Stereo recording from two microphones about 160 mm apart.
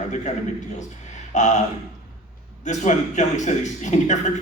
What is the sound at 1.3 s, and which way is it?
Speech, 50° left (ahead or behind).